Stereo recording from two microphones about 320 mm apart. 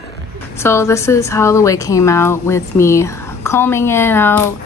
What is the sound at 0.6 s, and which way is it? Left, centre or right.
A woman's voice, centre.